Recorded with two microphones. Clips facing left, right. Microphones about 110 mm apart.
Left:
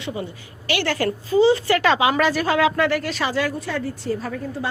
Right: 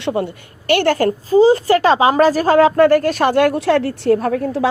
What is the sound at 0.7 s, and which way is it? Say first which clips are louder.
A woman's voice: right 8 dB; 50° right (ahead or behind).